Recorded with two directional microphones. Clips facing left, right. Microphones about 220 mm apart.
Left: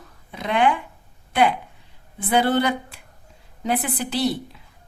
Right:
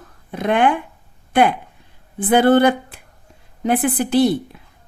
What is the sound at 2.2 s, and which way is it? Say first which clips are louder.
A woman's voice: right 7 dB; 55° right (ahead or behind).